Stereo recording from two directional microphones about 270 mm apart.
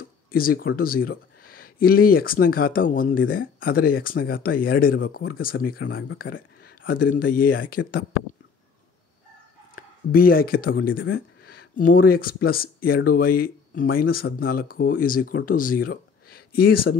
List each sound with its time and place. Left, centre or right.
0.3 s speech: left
9.8 s speech: left